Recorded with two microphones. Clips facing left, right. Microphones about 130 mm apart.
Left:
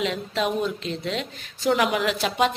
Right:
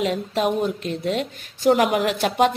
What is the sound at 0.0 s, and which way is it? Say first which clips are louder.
Speech: right 3 dB; 45° right (ahead or behind).